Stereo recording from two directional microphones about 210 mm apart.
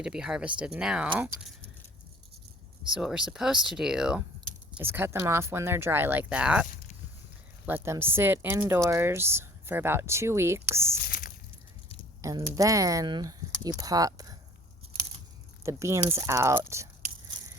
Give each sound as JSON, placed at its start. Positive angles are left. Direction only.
{"t": 0.0, "sound": "speech", "side_deg": -5}
{"t": 2.9, "sound": "speech", "side_deg": -5}
{"t": 7.7, "sound": "speech", "side_deg": -10}
{"t": 11.0, "sound": "a sound", "side_deg": 40}
{"t": 12.2, "sound": "speech", "side_deg": -15}
{"t": 15.6, "sound": "speech", "side_deg": -15}